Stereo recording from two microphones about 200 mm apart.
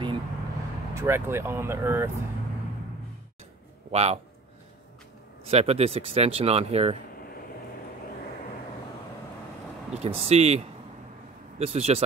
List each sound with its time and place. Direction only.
0.9 s speech: 15° right (ahead or behind)
3.9 s speech: 30° right (ahead or behind)
5.5 s speech: 30° right (ahead or behind)
9.9 s speech: 30° right (ahead or behind)